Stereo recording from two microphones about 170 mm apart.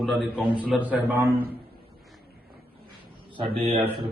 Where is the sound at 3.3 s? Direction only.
30° right (ahead or behind).